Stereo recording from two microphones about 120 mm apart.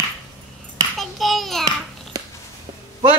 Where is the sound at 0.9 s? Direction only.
Centre (ahead or behind).